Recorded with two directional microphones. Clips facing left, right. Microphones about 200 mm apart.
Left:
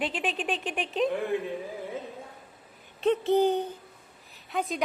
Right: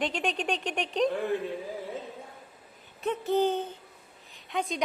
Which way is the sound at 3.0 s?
30° left (ahead or behind).